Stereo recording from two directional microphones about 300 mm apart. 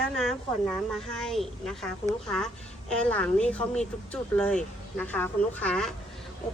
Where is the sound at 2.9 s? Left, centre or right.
Centre.